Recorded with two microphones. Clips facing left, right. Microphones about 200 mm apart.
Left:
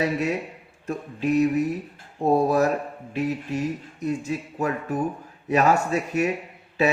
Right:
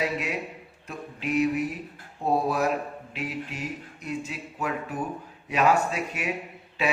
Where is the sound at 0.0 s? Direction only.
45° left (ahead or behind).